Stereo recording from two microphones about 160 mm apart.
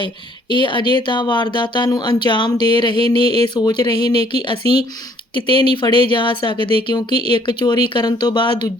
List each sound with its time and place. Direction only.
0.5 s speech: 30° left (ahead or behind)